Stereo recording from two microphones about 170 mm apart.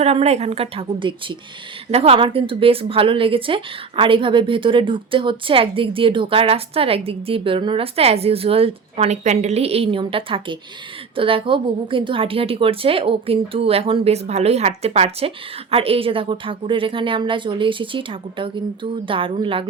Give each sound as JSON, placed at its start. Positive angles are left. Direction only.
{"t": 0.0, "sound": "a woman's voice", "side_deg": -35}